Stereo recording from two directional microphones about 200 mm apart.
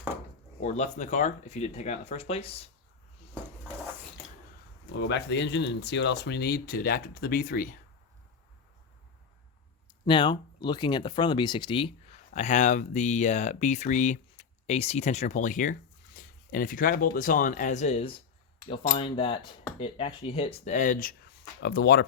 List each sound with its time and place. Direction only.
0.6 s speech: 35° left (ahead or behind)
4.9 s speech: 60° left (ahead or behind)
10.1 s speech: 25° left (ahead or behind); by 22.0 s 55° left (ahead or behind)